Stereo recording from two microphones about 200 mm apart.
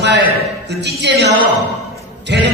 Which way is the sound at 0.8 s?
60° right (ahead or behind).